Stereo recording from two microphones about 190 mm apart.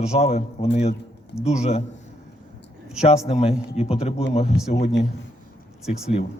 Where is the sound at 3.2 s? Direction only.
35° left (ahead or behind).